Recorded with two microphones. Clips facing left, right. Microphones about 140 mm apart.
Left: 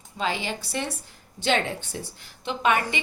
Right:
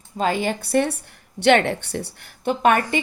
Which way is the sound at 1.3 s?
70° right (ahead or behind).